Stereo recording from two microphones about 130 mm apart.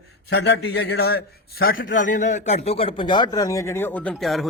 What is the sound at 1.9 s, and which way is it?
Speech, 80° left.